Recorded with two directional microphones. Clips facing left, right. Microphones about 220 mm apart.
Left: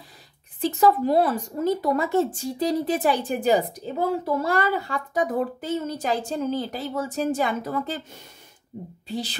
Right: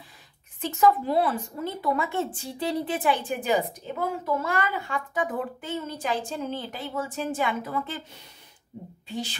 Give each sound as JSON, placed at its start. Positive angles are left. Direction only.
{"t": 0.6, "sound": "a woman's voice", "side_deg": 35}
{"t": 9.0, "sound": "speech", "side_deg": 35}